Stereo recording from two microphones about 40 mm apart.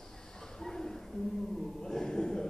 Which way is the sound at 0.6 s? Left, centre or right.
Centre.